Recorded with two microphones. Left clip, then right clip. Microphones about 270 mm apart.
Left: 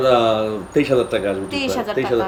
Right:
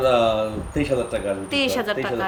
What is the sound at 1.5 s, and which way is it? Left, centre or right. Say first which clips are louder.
Speech: even; centre.